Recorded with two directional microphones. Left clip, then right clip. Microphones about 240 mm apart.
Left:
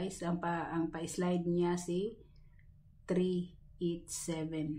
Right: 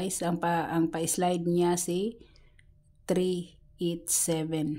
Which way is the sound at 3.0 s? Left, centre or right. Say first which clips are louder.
Right 6 dB; right.